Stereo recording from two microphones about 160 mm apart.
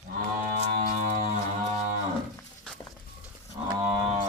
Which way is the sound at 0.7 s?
65° right (ahead or behind).